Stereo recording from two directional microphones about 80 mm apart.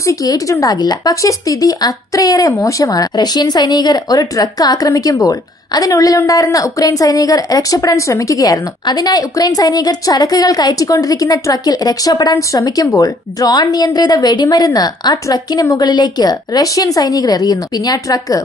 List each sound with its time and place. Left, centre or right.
0.0 s speech: left
15.9 s speech: left